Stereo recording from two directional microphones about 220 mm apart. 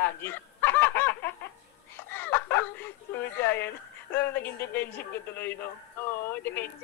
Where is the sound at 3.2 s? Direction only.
10° left (ahead or behind).